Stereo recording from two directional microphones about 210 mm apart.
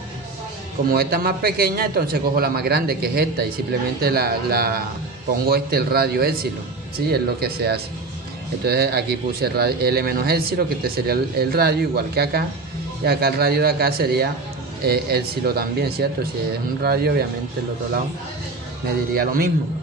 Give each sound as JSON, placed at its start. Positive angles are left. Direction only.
{"t": 0.9, "sound": "speech", "side_deg": -45}
{"t": 19.1, "sound": "speech", "side_deg": -45}